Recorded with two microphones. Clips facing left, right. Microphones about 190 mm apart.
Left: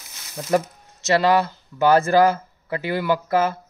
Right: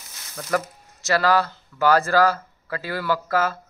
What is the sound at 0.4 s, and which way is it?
Speech, 15° left (ahead or behind).